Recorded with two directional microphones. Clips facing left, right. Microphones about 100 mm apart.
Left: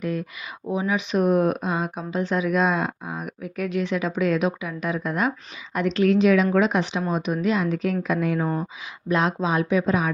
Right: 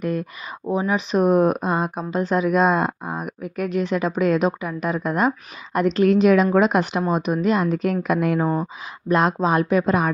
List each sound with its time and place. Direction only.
0.0 s speech: 50° right (ahead or behind)
0.7 s speech: 40° right (ahead or behind); by 10.1 s 55° right (ahead or behind)